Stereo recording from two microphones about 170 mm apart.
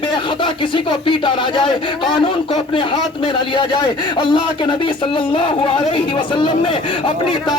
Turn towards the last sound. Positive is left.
turn(degrees=30)  # may be behind; listen again after turning